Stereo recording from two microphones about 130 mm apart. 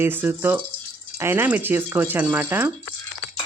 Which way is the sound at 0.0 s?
15° right (ahead or behind).